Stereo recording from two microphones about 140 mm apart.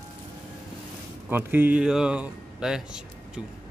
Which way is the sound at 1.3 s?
15° right (ahead or behind).